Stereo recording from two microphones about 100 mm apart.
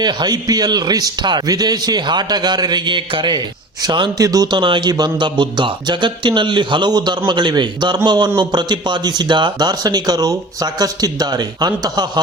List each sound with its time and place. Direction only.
0.0 s speech: 45° right (ahead or behind)
4.2 s speech: 35° right (ahead or behind)
4.5 s speech: 50° right (ahead or behind)